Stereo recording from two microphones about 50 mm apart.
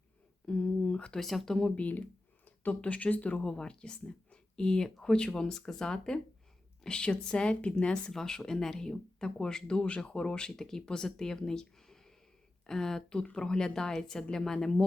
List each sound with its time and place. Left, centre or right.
0.4 s a sound: centre
1.2 s speech: centre
1.5 s speech: centre
1.7 s speech: left
3.4 s speech: centre
8.1 s speech: centre